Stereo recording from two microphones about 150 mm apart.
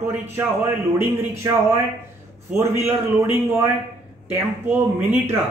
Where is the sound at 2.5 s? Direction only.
15° right (ahead or behind).